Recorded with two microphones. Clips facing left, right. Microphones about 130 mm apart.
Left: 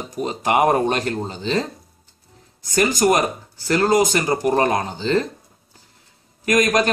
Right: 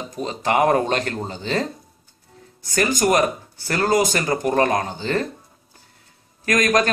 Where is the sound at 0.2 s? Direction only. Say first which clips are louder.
Left 1 dB; 20° left (ahead or behind).